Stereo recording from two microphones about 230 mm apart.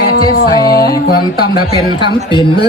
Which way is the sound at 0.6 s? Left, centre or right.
Centre.